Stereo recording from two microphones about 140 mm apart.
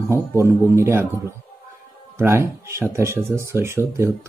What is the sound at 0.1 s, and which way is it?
Speech, 20° right (ahead or behind).